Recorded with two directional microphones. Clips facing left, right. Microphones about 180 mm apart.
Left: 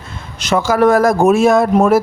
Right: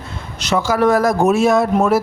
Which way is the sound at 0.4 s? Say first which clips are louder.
Left 3 dB; 50° left (ahead or behind).